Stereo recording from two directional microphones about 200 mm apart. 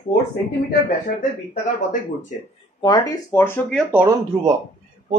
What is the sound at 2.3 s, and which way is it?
Speech, 35° left (ahead or behind).